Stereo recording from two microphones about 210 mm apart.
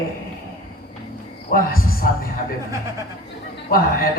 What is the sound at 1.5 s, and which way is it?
Speech, 45° left (ahead or behind).